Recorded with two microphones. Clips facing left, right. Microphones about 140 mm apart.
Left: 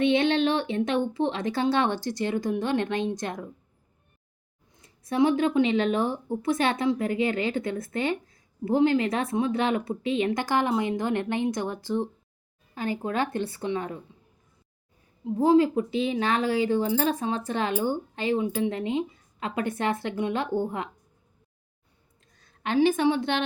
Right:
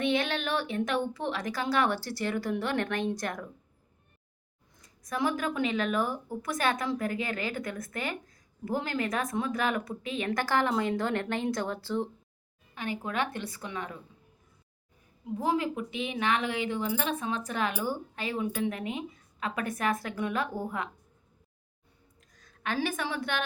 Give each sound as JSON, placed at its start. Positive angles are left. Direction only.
{"t": 0.0, "sound": "speech", "side_deg": 25}
{"t": 4.7, "sound": "speech", "side_deg": 25}
{"t": 12.7, "sound": "a woman's voice", "side_deg": 35}
{"t": 15.2, "sound": "speech", "side_deg": 30}
{"t": 22.3, "sound": "a woman's voice", "side_deg": 30}